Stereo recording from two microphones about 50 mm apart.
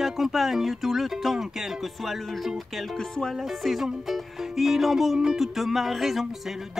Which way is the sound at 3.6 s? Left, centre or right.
Centre.